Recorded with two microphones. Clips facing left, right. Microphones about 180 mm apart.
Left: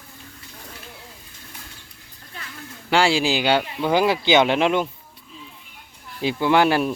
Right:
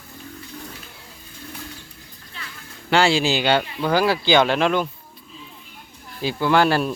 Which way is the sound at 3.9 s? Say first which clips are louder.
Even; 20° left (ahead or behind).